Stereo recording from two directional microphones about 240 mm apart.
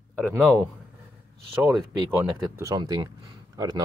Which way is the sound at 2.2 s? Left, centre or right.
Centre.